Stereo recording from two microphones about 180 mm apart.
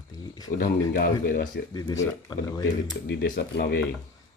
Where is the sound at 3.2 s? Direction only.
60° left (ahead or behind).